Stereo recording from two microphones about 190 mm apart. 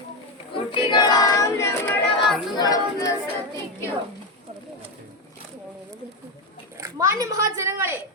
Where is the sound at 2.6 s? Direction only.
20° left (ahead or behind).